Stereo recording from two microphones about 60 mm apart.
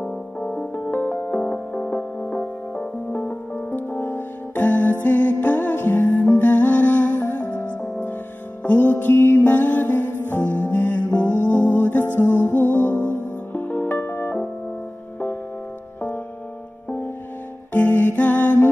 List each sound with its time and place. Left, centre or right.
0.0 s music: left
0.9 s music: left
17.7 s music: left